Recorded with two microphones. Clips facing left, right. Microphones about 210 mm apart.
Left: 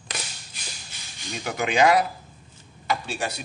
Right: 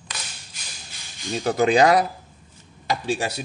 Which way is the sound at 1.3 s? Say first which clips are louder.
Right 7 dB; 35° right (ahead or behind).